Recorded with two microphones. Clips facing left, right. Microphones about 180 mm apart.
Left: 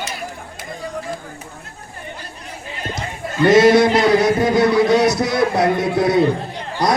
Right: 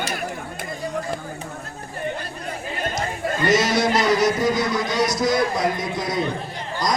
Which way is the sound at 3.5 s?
55° left (ahead or behind).